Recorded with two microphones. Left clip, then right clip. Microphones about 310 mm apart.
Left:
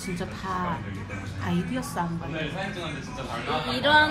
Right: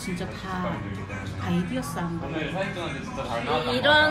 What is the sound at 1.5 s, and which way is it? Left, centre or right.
Speech, left.